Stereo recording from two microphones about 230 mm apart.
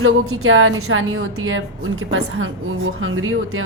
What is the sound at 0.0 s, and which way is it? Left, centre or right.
A woman's voice, right.